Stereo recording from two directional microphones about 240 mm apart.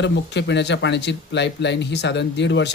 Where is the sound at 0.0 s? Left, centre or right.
Left.